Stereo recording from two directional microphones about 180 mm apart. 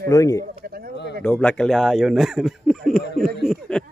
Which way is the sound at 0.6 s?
55° right (ahead or behind).